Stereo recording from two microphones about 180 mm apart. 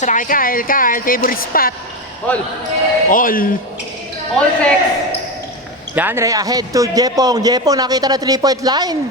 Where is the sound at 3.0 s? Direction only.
50° left (ahead or behind).